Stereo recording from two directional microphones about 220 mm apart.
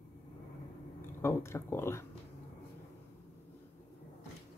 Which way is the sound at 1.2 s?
10° left (ahead or behind).